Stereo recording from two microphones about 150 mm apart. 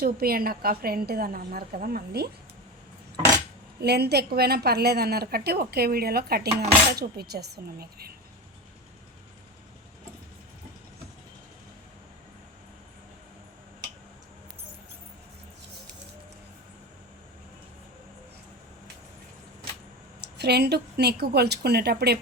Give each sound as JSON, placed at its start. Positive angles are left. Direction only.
{"t": 0.0, "sound": "a woman's voice", "side_deg": -85}
{"t": 3.8, "sound": "a woman's voice", "side_deg": -90}
{"t": 20.4, "sound": "a woman's voice", "side_deg": -90}